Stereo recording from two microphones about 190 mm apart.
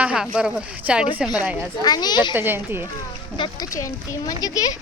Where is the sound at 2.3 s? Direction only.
10° right (ahead or behind).